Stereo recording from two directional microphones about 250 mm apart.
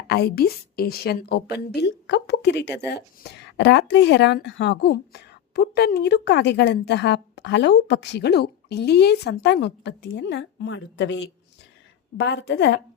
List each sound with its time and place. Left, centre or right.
0.1 s a woman's voice: left